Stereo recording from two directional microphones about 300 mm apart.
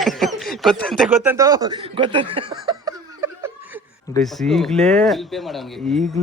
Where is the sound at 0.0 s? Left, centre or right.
Centre.